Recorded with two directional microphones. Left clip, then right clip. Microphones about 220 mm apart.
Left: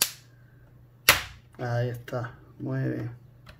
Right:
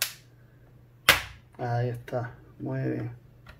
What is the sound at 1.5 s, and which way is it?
Speech, 15° left (ahead or behind).